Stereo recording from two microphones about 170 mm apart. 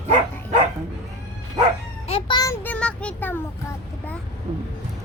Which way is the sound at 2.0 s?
30° left (ahead or behind).